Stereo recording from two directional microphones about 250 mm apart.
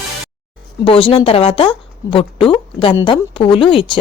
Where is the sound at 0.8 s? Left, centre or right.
Left.